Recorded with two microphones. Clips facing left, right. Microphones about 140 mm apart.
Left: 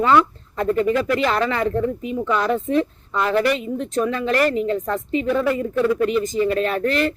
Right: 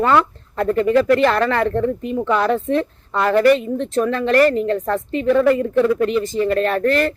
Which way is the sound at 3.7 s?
35° right (ahead or behind).